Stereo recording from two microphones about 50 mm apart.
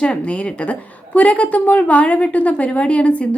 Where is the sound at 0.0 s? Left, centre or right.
Left.